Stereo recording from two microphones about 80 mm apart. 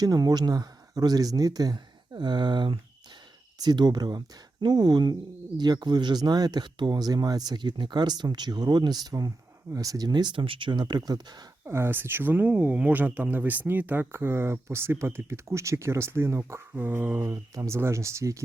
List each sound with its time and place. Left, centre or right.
0.0 s speech: right
2.1 s speech: right
3.6 s speech: right
11.6 s speech: right
17.2 s speech: right